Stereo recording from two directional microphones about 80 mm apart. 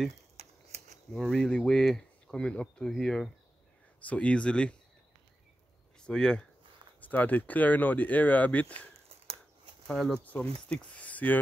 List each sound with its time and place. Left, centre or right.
1.1 s speech: centre
5.9 s speech: centre
7.0 s speech: left
9.8 s speech: centre
10.2 s speech: centre